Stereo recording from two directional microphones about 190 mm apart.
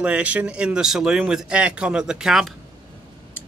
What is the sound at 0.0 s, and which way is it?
Speech, 5° right (ahead or behind).